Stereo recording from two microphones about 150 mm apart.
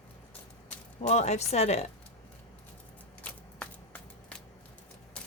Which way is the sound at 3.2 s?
10° left (ahead or behind).